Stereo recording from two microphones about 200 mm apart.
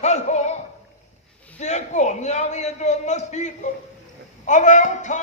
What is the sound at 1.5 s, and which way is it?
A man's voice, 35° left (ahead or behind).